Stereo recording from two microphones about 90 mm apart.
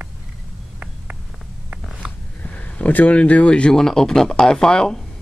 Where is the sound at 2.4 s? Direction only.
15° left (ahead or behind).